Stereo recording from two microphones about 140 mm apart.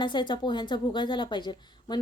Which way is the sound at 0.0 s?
35° left (ahead or behind).